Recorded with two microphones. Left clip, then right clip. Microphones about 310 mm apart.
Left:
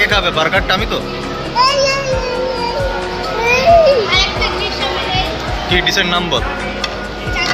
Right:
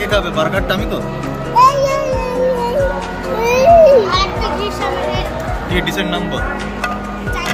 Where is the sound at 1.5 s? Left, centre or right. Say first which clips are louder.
Right 3 dB; right.